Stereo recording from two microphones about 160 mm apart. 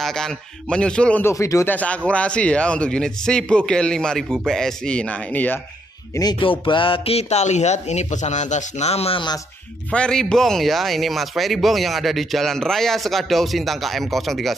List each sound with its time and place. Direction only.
0.0 s speech: 5° left (ahead or behind)
1.3 s speech: 20° left (ahead or behind)
6.1 s speech: 30° left (ahead or behind)
9.8 s speech: 5° left (ahead or behind)